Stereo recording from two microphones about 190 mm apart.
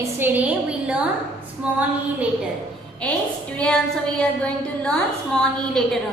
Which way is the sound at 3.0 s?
5° left (ahead or behind).